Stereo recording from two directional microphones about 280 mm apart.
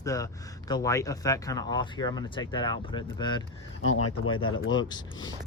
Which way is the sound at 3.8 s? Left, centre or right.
Left.